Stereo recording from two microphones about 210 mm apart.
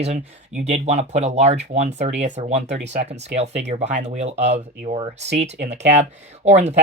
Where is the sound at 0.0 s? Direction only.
35° right (ahead or behind).